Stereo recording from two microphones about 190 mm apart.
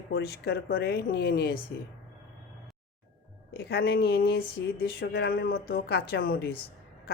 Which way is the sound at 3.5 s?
60° left (ahead or behind).